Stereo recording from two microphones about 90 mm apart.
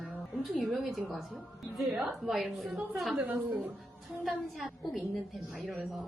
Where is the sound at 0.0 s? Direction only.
Centre (ahead or behind).